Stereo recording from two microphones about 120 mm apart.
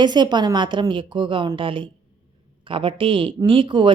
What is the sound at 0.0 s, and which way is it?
Speech, 40° right (ahead or behind).